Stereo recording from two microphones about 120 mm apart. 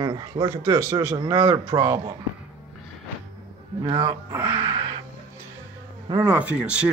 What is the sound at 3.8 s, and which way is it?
Speech, 40° right (ahead or behind).